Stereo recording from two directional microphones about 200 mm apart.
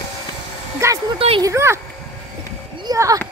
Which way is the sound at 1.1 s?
25° right (ahead or behind).